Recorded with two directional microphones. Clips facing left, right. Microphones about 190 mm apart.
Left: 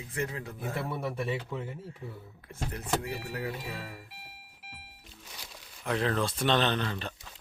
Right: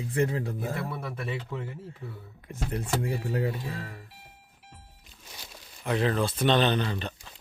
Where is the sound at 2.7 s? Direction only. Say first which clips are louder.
Right 3 dB; 30° right (ahead or behind).